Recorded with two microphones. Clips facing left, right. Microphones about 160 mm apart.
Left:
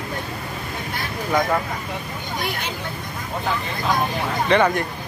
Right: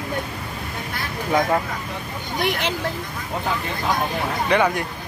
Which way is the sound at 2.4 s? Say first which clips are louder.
Right 7 dB; 85° right.